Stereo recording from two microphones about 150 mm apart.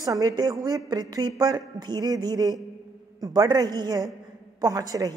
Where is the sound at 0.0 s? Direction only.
25° right (ahead or behind).